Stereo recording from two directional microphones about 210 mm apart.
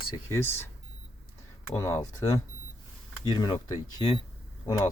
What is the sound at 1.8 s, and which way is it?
Speech, 15° left (ahead or behind).